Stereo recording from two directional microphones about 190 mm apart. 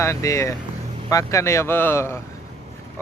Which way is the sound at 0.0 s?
15° left (ahead or behind).